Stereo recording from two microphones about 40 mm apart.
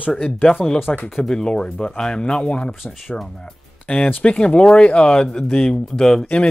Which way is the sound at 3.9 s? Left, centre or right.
Left.